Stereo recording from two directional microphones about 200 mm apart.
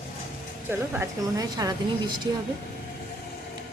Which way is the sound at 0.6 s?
10° right (ahead or behind).